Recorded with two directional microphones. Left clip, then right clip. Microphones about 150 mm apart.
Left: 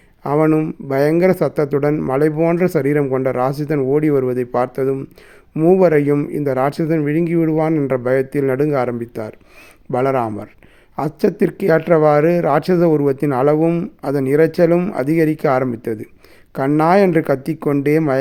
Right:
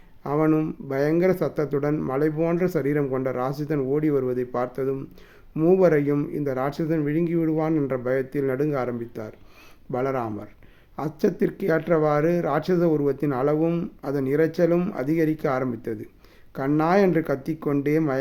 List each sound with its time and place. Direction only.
0.2 s speech: 45° left (ahead or behind)